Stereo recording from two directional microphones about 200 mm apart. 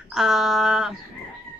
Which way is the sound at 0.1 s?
Centre (ahead or behind).